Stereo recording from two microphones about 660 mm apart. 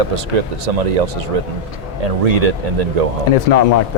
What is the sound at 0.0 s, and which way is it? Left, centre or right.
Speech, right.